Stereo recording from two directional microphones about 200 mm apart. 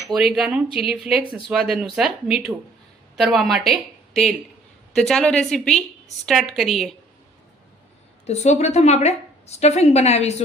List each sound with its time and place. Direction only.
0.1 s speech: centre (ahead or behind)
8.3 s a woman's voice: 35° left (ahead or behind)